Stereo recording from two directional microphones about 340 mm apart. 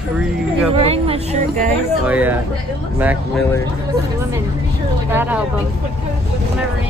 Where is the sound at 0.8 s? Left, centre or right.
Centre.